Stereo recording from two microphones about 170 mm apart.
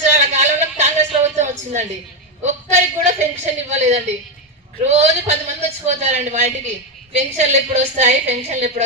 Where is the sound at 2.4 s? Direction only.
45° right (ahead or behind).